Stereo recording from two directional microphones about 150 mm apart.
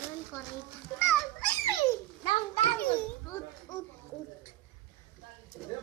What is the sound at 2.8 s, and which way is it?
Speech, 10° left (ahead or behind).